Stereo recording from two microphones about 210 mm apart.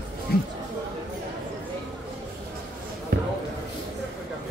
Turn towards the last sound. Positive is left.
turn(degrees=-45)  # may be behind; listen again after turning